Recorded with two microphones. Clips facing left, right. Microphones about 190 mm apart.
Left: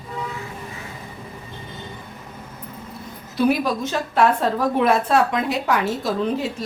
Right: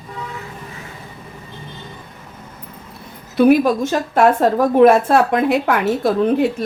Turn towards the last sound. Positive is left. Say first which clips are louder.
# right 7 dB
turn(degrees=-60)  # may be behind; listen again after turning